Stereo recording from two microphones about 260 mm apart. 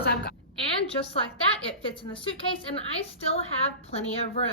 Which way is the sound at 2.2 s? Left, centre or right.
Centre.